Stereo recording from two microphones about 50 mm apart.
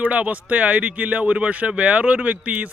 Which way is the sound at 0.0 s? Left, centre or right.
Right.